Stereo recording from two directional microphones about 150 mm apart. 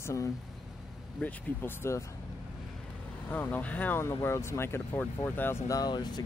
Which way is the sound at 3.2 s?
10° left (ahead or behind).